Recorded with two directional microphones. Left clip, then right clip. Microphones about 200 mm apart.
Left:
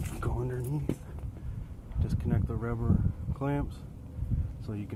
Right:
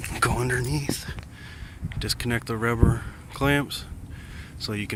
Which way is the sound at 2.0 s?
20° right (ahead or behind).